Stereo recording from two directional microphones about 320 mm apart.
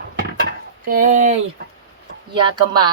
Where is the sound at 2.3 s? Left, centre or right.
Centre.